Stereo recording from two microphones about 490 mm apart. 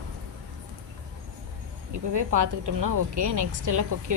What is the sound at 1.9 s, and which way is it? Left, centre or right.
Speech, right.